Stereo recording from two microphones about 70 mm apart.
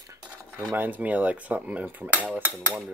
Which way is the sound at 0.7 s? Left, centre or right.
Right.